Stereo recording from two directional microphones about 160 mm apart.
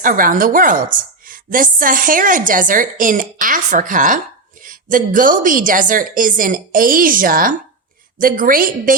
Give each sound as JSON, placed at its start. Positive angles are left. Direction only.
{"t": 0.0, "sound": "a woman's voice", "side_deg": -60}